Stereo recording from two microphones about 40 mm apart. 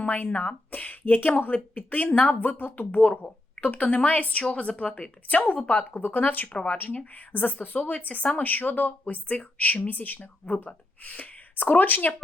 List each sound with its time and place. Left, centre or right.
0.0 s speech: left
2.4 s speech: left
6.0 s speech: left